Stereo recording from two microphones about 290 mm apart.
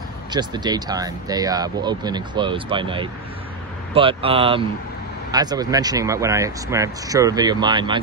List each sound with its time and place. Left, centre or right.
0.3 s speech: centre